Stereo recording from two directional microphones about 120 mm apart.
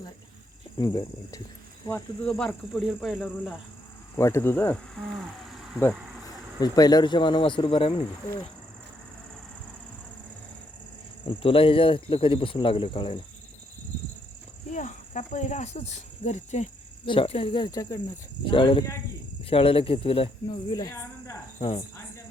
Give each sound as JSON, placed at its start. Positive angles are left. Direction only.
{"t": 0.8, "sound": "speech", "side_deg": 35}
{"t": 2.2, "sound": "speech", "side_deg": 10}
{"t": 4.2, "sound": "speech", "side_deg": 20}
{"t": 4.9, "sound": "speech", "side_deg": 0}
{"t": 6.6, "sound": "speech", "side_deg": 35}
{"t": 11.3, "sound": "speech", "side_deg": 50}
{"t": 14.7, "sound": "speech", "side_deg": 90}
{"t": 17.1, "sound": "speech", "side_deg": 50}
{"t": 17.7, "sound": "speech", "side_deg": 30}
{"t": 18.4, "sound": "speech", "side_deg": 45}
{"t": 20.7, "sound": "speech", "side_deg": 30}